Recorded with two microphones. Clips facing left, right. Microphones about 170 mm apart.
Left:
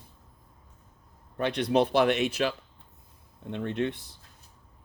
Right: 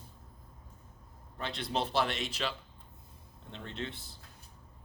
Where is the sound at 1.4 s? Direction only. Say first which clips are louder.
Left 10 dB; 65° left (ahead or behind).